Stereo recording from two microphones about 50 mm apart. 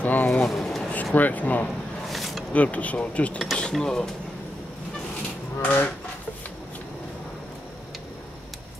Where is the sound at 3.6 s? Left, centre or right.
Centre.